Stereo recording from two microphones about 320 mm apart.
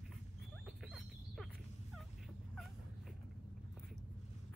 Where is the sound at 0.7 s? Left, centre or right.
Centre.